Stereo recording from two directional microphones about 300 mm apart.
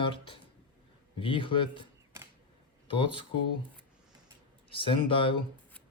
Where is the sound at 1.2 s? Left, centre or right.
Centre.